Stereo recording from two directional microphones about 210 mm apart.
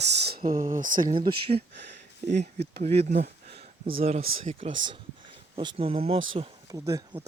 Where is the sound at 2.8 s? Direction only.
30° right (ahead or behind).